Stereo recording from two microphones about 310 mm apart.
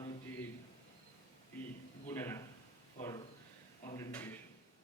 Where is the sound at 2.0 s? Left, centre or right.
Centre.